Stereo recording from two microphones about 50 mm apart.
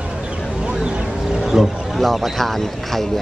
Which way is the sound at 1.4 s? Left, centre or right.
Centre.